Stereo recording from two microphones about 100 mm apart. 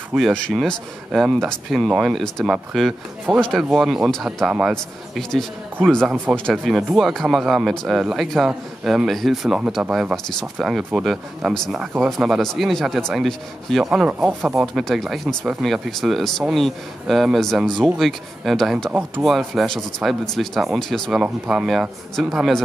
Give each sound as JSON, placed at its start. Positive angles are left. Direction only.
{"t": 0.3, "sound": "speech", "side_deg": 5}
{"t": 6.5, "sound": "speech", "side_deg": 0}
{"t": 14.8, "sound": "speech", "side_deg": 0}
{"t": 18.9, "sound": "speech", "side_deg": -15}
{"t": 19.2, "sound": "speech", "side_deg": 0}